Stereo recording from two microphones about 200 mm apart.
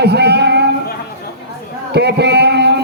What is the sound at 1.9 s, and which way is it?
Speech, 55° right (ahead or behind).